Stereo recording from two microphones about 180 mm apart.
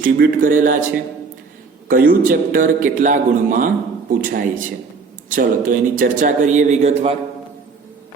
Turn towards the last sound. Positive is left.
turn(degrees=-35)  # may be behind; listen again after turning